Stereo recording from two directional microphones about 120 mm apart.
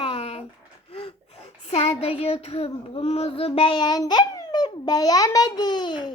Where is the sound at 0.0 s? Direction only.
60° left (ahead or behind).